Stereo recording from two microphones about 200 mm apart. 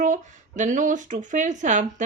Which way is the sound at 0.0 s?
40° right (ahead or behind).